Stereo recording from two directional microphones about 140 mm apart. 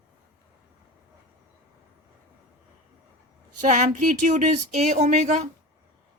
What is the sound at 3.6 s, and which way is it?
Speech, 60° right (ahead or behind).